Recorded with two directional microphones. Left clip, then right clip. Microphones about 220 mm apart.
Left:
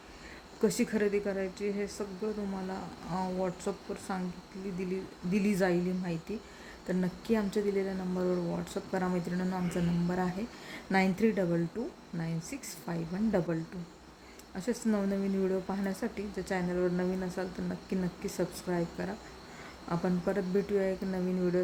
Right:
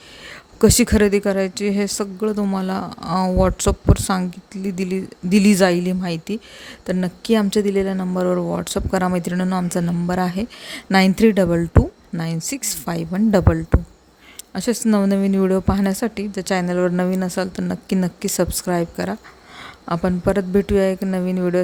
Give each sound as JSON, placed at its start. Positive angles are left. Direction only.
{"t": 0.6, "sound": "speech", "side_deg": -45}